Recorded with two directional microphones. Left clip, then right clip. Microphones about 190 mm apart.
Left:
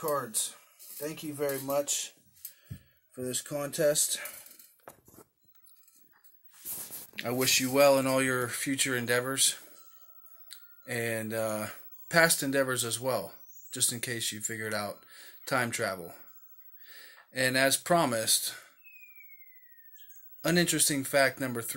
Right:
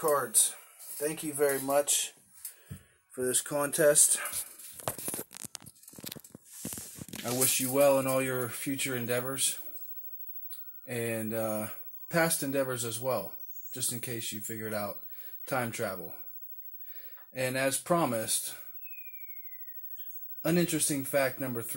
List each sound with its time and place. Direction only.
0.0 s speech: 15° left (ahead or behind)
3.2 s speech: 15° left (ahead or behind)
7.6 s speech: 15° left (ahead or behind)
10.9 s speech: 10° left (ahead or behind)
20.4 s speech: 10° left (ahead or behind)